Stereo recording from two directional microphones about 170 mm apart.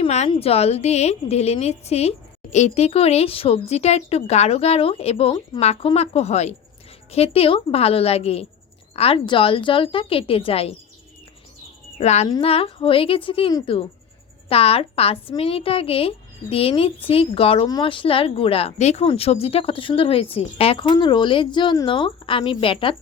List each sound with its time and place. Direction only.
0.0 s a woman's voice: 40° left (ahead or behind)
11.9 s a woman's voice: 40° left (ahead or behind)